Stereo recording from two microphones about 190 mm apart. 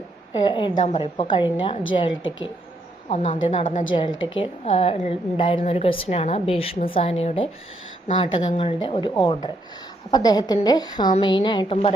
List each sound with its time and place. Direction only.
0.3 s a woman's voice: 25° left (ahead or behind)